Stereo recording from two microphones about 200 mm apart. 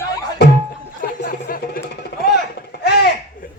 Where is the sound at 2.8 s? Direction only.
50° left (ahead or behind).